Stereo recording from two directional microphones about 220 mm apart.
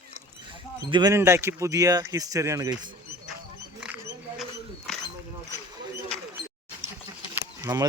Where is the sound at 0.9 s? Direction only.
15° right (ahead or behind).